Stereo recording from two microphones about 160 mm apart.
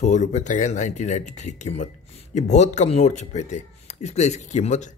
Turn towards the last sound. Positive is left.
turn(degrees=45)  # may be behind; listen again after turning